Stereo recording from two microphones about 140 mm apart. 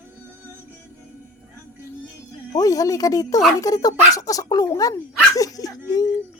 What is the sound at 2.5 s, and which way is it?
Speech, 25° left (ahead or behind).